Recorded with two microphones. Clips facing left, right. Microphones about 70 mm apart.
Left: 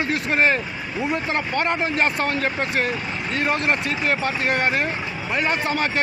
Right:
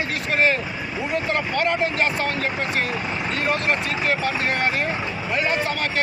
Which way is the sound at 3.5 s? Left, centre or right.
Left.